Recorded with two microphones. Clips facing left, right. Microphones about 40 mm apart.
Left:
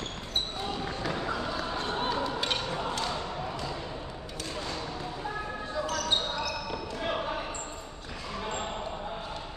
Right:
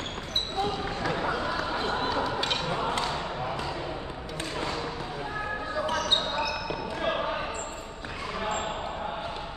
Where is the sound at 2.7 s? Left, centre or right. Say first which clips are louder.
Right 4 dB; right.